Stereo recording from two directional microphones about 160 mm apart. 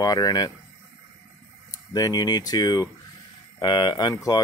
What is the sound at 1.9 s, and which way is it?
Speech, 25° left (ahead or behind).